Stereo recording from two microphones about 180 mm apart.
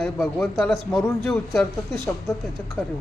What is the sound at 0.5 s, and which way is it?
A man's voice, centre (ahead or behind).